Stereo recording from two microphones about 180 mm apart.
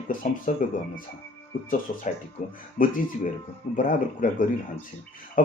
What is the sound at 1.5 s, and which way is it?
Speech, 50° left (ahead or behind).